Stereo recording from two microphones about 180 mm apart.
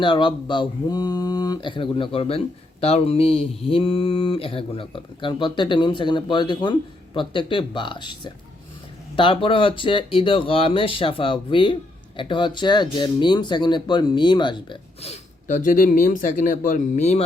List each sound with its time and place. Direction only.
0.0 s speech: 25° left (ahead or behind)